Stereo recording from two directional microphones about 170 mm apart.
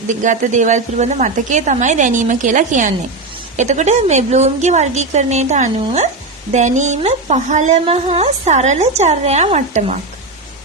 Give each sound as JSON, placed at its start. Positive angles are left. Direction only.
{"t": 0.1, "sound": "a woman's voice", "side_deg": -45}